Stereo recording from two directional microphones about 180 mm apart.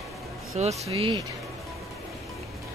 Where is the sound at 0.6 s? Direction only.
35° right (ahead or behind).